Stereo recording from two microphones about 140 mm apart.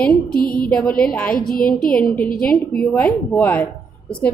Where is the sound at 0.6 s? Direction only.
5° left (ahead or behind).